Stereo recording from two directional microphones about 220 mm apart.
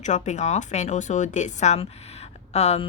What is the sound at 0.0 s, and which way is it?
A woman's voice, 30° left (ahead or behind).